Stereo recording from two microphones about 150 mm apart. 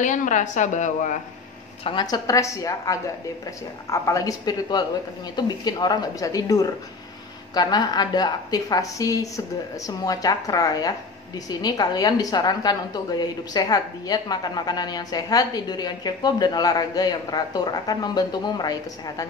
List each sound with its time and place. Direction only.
0.0 s a woman's voice: 55° left (ahead or behind)
1.9 s a woman's voice: 30° left (ahead or behind)